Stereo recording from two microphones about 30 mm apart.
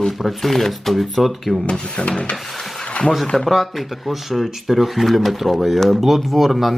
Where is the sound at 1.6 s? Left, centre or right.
Left.